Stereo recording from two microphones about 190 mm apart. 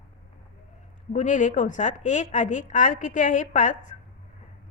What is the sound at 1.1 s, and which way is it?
A woman's voice, 40° left (ahead or behind).